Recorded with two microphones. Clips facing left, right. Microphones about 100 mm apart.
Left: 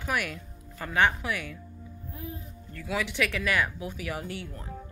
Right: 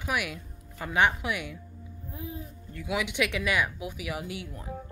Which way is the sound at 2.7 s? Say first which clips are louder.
Even; 15° right (ahead or behind).